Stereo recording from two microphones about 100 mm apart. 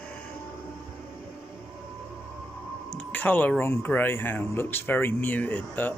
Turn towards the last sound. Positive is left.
turn(degrees=20)  # may be behind; listen again after turning